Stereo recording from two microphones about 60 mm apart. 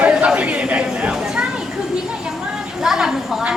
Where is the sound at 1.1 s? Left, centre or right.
Centre.